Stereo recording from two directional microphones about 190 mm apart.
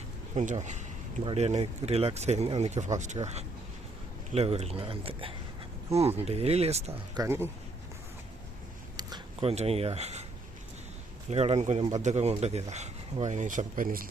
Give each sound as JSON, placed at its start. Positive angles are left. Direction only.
{"t": 0.3, "sound": "speech", "side_deg": -40}
{"t": 7.1, "sound": "speech", "side_deg": -15}
{"t": 9.0, "sound": "speech", "side_deg": -20}
{"t": 11.3, "sound": "speech", "side_deg": -35}